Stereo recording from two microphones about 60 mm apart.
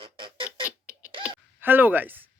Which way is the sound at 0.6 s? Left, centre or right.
Right.